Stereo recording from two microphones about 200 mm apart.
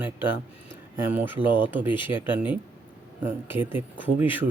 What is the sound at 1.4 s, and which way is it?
Speech, 25° left (ahead or behind).